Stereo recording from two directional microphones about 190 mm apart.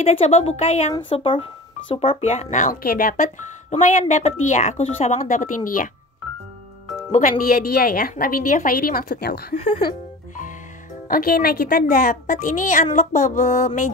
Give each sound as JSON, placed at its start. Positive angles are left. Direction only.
{"t": 0.0, "sound": "speech", "side_deg": 35}
{"t": 7.1, "sound": "speech", "side_deg": 40}
{"t": 11.1, "sound": "speech", "side_deg": 50}